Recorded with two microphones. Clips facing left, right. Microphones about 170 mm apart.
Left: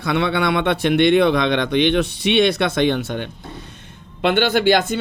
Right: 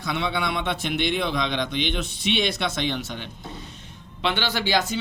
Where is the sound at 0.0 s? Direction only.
60° left (ahead or behind).